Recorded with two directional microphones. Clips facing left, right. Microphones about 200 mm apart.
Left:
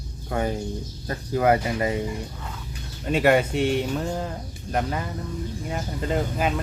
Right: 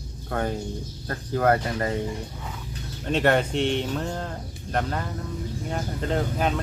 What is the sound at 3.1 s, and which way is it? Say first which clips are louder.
Speech: left 2 dB; 10° left (ahead or behind).